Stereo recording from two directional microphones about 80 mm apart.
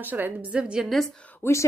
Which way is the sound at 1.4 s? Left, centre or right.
Left.